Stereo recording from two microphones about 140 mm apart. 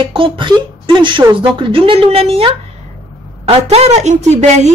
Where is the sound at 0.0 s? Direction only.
35° right (ahead or behind).